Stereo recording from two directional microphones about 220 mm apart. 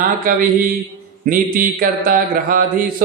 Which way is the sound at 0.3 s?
40° right (ahead or behind).